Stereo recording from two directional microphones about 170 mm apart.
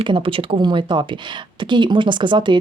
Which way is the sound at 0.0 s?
30° right (ahead or behind).